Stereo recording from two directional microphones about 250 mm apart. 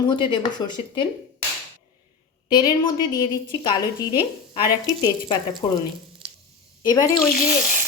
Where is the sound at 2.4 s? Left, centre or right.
Centre.